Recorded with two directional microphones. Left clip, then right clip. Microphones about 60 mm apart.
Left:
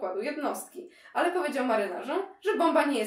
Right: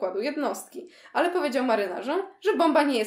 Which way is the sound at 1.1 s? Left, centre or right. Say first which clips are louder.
Right 3 dB; right.